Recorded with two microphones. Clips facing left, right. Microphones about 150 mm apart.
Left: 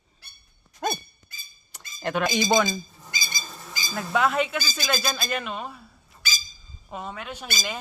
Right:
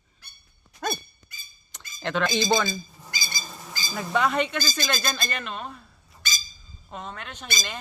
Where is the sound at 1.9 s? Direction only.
10° left (ahead or behind).